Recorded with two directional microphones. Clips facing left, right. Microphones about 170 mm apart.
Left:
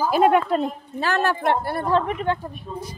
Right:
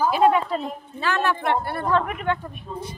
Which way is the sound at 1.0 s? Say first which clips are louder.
Left 2 dB; 40° left (ahead or behind).